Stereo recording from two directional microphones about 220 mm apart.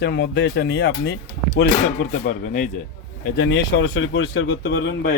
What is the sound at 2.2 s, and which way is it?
Speech, 40° left (ahead or behind).